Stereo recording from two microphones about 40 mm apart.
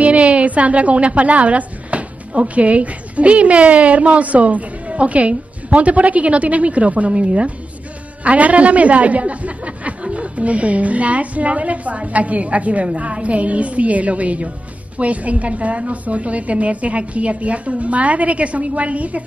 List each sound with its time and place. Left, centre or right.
0.0 s a woman's voice: right